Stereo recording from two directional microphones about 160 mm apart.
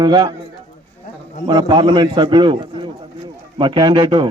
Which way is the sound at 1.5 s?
25° right (ahead or behind).